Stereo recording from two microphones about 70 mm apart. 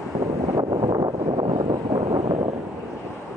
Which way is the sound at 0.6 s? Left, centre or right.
Right.